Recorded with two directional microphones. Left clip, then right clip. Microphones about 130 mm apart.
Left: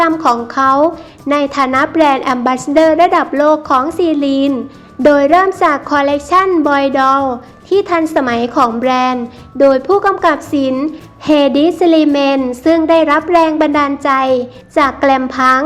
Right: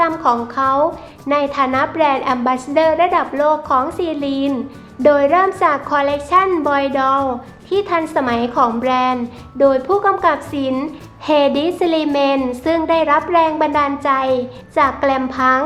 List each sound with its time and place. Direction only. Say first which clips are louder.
0.1 s a woman's voice: left 4 dB; 35° left (ahead or behind)